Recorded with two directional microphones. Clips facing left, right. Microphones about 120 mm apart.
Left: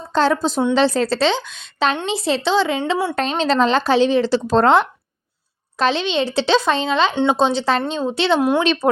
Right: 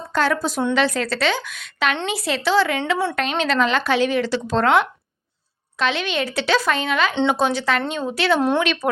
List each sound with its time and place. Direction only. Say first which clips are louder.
0.1 s a woman's voice: left 4 dB; 25° left (ahead or behind)
5.7 s speech: left 4 dB; 35° left (ahead or behind)
8.4 s speech: left 2 dB; 5° left (ahead or behind)
8.6 s speech: left 4 dB; 30° left (ahead or behind)